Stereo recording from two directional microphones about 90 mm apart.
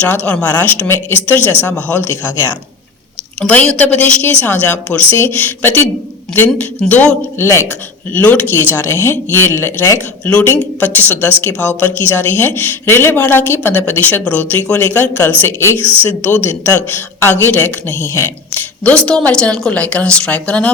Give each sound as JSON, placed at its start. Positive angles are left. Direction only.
{"t": 0.0, "sound": "a woman's voice", "side_deg": 15}
{"t": 3.4, "sound": "a woman's voice", "side_deg": 10}
{"t": 7.3, "sound": "a woman's voice", "side_deg": 30}
{"t": 10.4, "sound": "a woman's voice", "side_deg": 20}
{"t": 18.8, "sound": "a woman's voice", "side_deg": 15}